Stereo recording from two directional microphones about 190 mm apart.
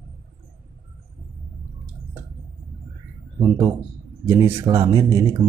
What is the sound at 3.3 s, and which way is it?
Speech, 15° right (ahead or behind).